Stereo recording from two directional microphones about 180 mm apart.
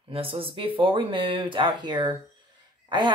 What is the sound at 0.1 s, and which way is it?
Speech, 30° right (ahead or behind).